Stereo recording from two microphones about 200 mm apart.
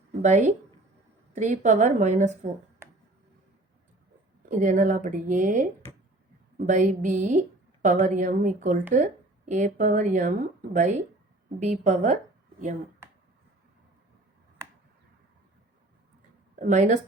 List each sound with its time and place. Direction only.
0.2 s a woman's voice: 35° right (ahead or behind)
4.4 s a woman's voice: 40° right (ahead or behind)
6.7 s a woman's voice: 40° right (ahead or behind)
16.6 s a woman's voice: 40° right (ahead or behind)